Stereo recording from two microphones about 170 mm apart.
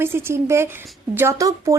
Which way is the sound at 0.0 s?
15° right (ahead or behind).